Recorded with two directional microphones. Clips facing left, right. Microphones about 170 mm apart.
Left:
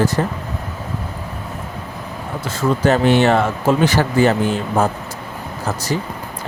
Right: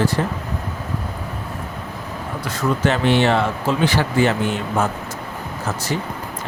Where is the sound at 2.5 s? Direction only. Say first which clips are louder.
Left 3 dB; 25° left (ahead or behind).